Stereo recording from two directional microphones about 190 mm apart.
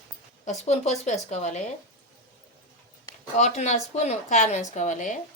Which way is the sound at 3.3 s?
35° left (ahead or behind).